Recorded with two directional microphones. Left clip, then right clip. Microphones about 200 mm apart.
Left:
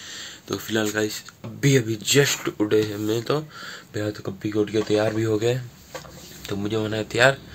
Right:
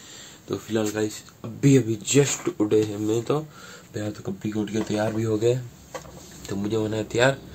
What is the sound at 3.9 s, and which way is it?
Speech, 25° left (ahead or behind).